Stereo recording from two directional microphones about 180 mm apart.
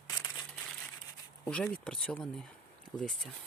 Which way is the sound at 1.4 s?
5° left (ahead or behind).